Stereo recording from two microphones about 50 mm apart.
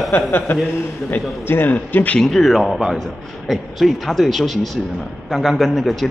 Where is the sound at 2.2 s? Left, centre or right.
Centre.